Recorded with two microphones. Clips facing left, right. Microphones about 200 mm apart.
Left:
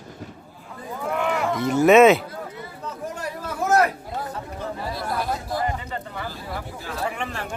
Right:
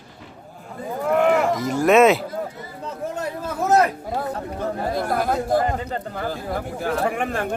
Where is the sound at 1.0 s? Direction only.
50° right (ahead or behind).